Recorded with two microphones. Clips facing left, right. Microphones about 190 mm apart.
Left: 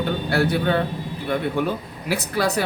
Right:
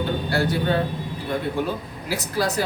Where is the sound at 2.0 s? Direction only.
60° left (ahead or behind).